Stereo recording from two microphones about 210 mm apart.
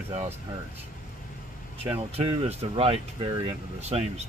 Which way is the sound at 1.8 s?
30° right (ahead or behind).